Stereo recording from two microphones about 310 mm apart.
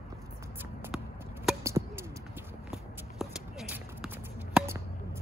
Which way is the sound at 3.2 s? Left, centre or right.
Centre.